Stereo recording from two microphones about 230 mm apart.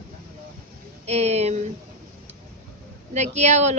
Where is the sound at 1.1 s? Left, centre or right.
Right.